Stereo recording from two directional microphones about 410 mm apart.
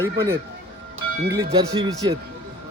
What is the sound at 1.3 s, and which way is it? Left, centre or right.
Speech, centre.